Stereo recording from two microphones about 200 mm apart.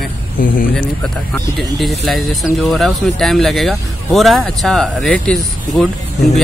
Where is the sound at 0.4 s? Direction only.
45° left (ahead or behind).